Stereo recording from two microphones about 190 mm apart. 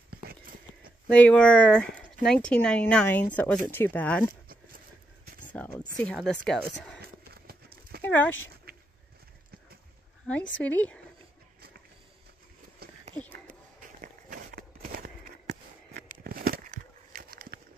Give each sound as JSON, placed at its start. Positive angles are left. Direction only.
{"t": 1.1, "sound": "speech", "side_deg": 5}
{"t": 4.5, "sound": "vehicle", "side_deg": -50}
{"t": 5.5, "sound": "speech", "side_deg": 5}
{"t": 7.4, "sound": "horse", "side_deg": -50}
{"t": 8.0, "sound": "speech", "side_deg": 10}
{"t": 8.7, "sound": "a sound", "side_deg": -55}
{"t": 10.3, "sound": "speech", "side_deg": 5}
{"t": 13.1, "sound": "a sound", "side_deg": 10}
{"t": 13.7, "sound": "a sound", "side_deg": -45}